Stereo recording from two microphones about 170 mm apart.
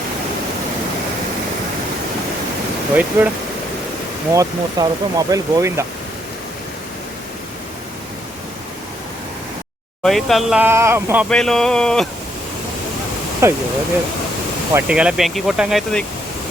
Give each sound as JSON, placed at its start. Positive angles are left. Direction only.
{"t": 2.9, "sound": "speech", "side_deg": -10}
{"t": 4.4, "sound": "speech", "side_deg": -20}
{"t": 10.0, "sound": "speech", "side_deg": 0}
{"t": 10.6, "sound": "speech", "side_deg": -15}
{"t": 11.3, "sound": "speech", "side_deg": 5}
{"t": 13.4, "sound": "speech", "side_deg": -15}
{"t": 14.7, "sound": "speech", "side_deg": -10}